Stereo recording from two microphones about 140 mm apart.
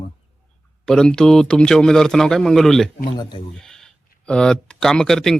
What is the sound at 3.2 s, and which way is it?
Speech, 35° left (ahead or behind).